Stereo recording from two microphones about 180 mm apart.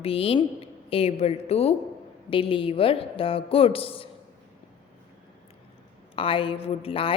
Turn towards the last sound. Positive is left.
turn(degrees=30)  # may be behind; listen again after turning